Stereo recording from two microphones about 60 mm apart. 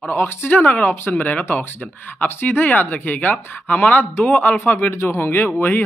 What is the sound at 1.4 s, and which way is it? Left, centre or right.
Speech, left.